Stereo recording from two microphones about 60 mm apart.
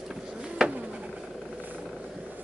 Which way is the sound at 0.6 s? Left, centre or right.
Centre.